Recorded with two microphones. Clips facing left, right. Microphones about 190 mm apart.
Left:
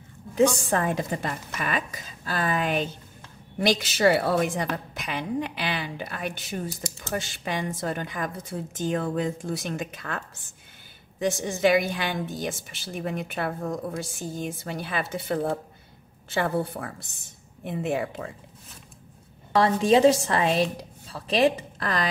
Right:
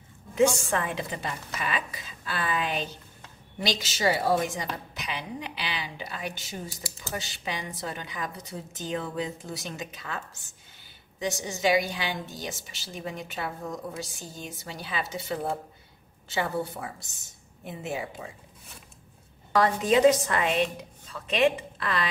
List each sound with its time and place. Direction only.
0.7 s a woman's voice: 40° left (ahead or behind); by 18.3 s 60° left (ahead or behind)
19.5 s a woman's voice: 30° left (ahead or behind)